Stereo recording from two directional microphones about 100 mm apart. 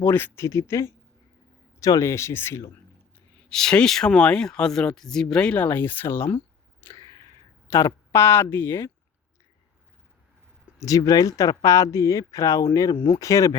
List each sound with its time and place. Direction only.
0.0 s speech: 20° left (ahead or behind)
3.5 s speech: 5° left (ahead or behind)
5.6 s speech: 20° left (ahead or behind)
6.8 s a sound: 30° left (ahead or behind)
7.7 s speech: 30° left (ahead or behind)
10.8 s speech: 35° left (ahead or behind)